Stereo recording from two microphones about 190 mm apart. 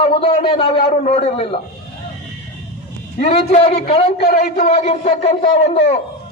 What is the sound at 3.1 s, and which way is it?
Speech, 35° left (ahead or behind).